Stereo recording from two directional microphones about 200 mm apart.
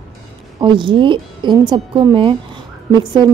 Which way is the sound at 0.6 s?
25° right (ahead or behind).